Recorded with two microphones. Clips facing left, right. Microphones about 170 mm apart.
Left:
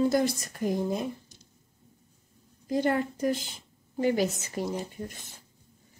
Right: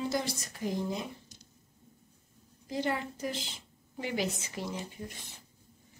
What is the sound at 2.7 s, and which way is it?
A woman's voice, 50° left (ahead or behind).